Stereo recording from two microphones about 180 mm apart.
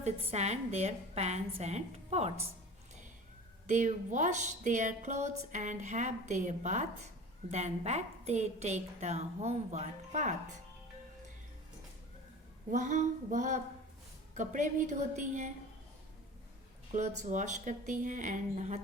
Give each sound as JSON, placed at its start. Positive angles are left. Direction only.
{"t": 0.0, "sound": "a woman's voice", "side_deg": -40}
{"t": 3.7, "sound": "a woman's voice", "side_deg": -45}
{"t": 12.7, "sound": "a woman's voice", "side_deg": -40}
{"t": 16.9, "sound": "a woman's voice", "side_deg": -40}